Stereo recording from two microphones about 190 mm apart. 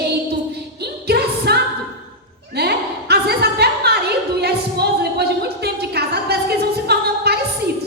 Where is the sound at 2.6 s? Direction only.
55° right (ahead or behind).